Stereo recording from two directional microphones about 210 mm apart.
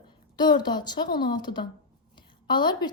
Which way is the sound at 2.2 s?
20° left (ahead or behind).